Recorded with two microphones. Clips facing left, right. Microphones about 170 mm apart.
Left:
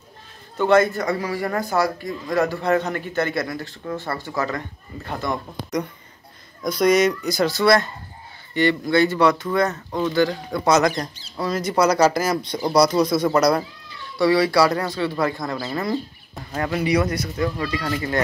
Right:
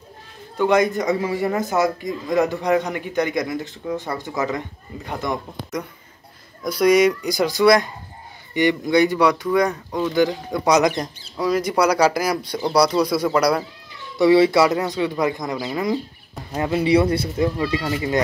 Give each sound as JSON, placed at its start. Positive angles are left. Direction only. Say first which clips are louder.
{"t": 0.6, "sound": "a man's voice", "louder": "even", "side_deg": -15}
{"t": 6.6, "sound": "a man's voice", "louder": "right 2 dB", "side_deg": -10}
{"t": 9.8, "sound": "speech", "louder": "even", "side_deg": 5}
{"t": 10.1, "sound": "a man's voice", "louder": "right 2 dB", "side_deg": -15}
{"t": 13.8, "sound": "a man's voice", "louder": "right 4 dB", "side_deg": -20}